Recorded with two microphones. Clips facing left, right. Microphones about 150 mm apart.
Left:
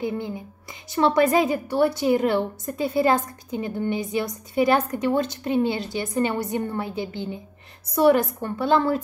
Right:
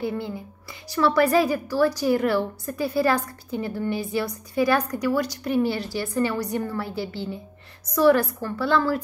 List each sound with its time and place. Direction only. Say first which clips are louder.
0.0 s a woman's voice: left 1 dB; 20° left (ahead or behind)